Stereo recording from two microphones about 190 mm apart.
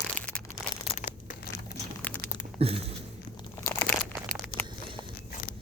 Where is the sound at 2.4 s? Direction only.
30° right (ahead or behind).